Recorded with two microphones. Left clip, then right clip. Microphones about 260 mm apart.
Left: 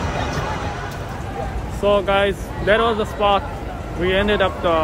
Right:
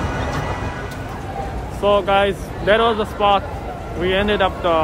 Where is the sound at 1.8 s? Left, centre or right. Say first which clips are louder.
Right 1 dB; centre.